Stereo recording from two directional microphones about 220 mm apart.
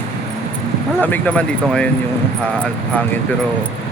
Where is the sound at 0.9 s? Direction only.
10° left (ahead or behind).